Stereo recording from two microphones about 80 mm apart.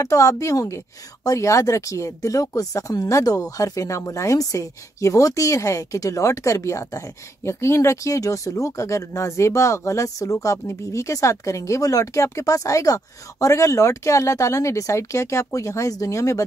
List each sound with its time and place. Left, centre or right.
0.0 s a woman's voice: left